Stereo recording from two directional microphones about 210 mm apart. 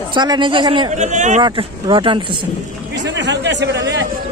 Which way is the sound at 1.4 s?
20° right (ahead or behind).